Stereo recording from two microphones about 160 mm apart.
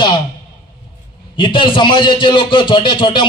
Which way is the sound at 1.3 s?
30° left (ahead or behind).